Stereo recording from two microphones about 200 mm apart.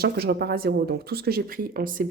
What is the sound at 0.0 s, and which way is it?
Speech, 55° right (ahead or behind).